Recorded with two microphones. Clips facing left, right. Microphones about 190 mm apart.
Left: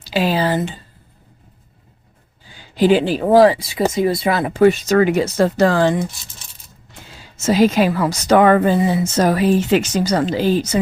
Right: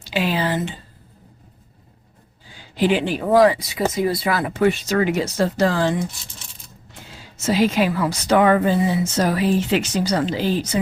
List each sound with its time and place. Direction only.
0.0 s speech: 35° left (ahead or behind)
2.7 s speech: 35° left (ahead or behind)
4.6 s a woman's voice: 45° left (ahead or behind); by 5.9 s 60° left (ahead or behind)
7.4 s a woman's voice: 40° left (ahead or behind)